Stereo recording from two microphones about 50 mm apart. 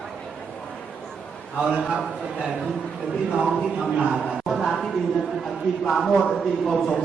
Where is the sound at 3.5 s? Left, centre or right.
Centre.